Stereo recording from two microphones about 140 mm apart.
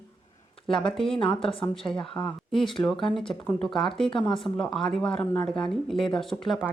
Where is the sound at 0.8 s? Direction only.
5° left (ahead or behind).